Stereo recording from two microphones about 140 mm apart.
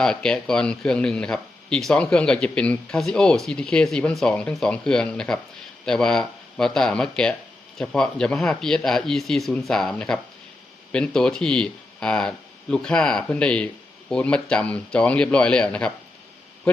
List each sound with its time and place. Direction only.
0.0 s a man's voice: 5° left (ahead or behind)